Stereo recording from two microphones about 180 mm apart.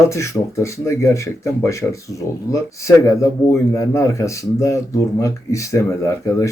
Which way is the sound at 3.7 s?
15° left (ahead or behind).